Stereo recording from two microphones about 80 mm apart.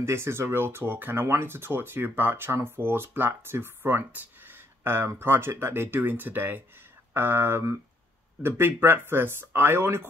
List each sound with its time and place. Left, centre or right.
0.0 s speech: right